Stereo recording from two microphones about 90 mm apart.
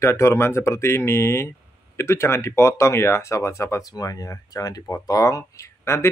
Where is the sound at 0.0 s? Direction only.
30° left (ahead or behind).